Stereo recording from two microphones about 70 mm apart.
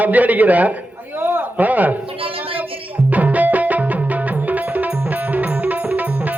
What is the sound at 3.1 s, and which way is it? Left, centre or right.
Music, right.